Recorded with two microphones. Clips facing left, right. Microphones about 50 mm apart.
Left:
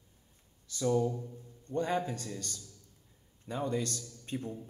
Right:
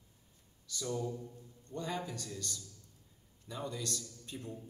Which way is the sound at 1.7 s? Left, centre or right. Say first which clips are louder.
Left 7 dB; left.